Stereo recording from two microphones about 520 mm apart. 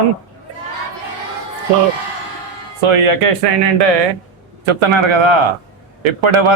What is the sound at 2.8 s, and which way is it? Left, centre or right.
Speech, right.